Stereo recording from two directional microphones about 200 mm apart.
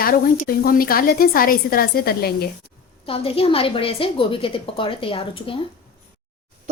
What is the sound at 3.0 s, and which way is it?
A woman's voice, 30° left (ahead or behind).